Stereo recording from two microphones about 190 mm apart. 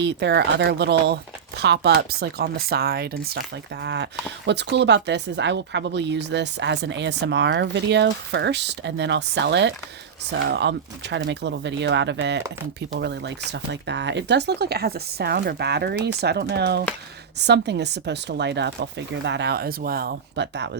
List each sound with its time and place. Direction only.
0.0 s speech: 65° right (ahead or behind)